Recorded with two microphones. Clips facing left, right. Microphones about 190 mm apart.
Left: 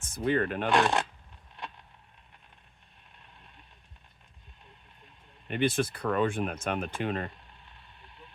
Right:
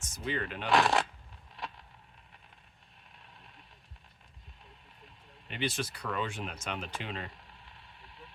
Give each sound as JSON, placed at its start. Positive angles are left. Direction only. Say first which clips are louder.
{"t": 0.0, "sound": "speech", "louder": "left 8 dB", "side_deg": 55}
{"t": 0.7, "sound": "speech", "louder": "even", "side_deg": 0}
{"t": 5.5, "sound": "speech", "louder": "left 7 dB", "side_deg": 50}